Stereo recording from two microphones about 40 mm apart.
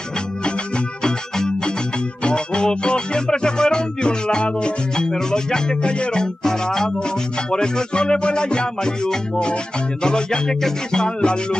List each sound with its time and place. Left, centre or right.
2.2 s music: left
6.4 s music: centre